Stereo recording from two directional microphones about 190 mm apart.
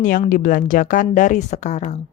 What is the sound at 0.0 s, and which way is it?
A woman's voice, 45° left (ahead or behind).